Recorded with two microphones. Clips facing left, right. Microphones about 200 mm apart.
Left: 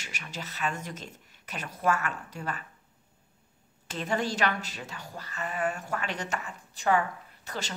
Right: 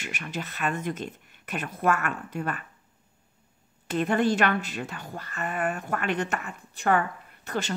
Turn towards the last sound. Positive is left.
turn(degrees=-55)  # may be behind; listen again after turning